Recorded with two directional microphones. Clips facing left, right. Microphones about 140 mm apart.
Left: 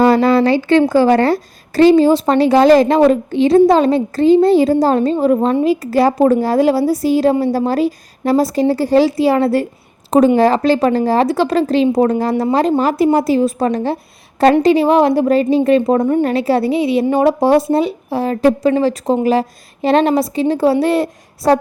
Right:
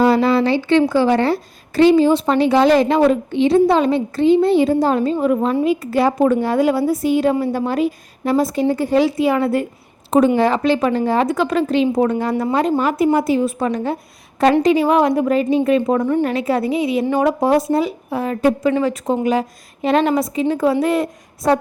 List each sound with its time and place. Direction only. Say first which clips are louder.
0.0 s a woman's voice: left 3 dB; 40° left (ahead or behind)